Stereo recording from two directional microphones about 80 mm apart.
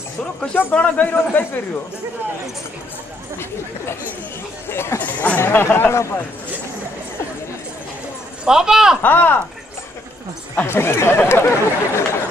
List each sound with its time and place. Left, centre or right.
0.6 s speech: centre
3.3 s speech: left
8.5 s speech: centre
9.0 s speech: left
10.7 s speech: left